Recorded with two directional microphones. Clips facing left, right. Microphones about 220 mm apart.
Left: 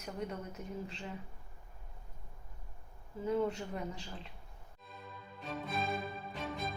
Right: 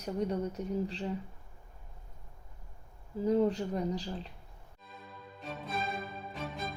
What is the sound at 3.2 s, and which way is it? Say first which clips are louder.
Speech: right 6 dB; 35° right (ahead or behind).